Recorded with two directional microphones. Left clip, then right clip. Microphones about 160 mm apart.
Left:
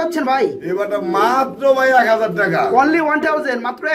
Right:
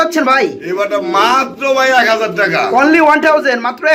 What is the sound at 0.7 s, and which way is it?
A man's voice, 20° left (ahead or behind).